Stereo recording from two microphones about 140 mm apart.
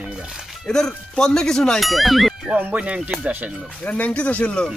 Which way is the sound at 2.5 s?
10° right (ahead or behind).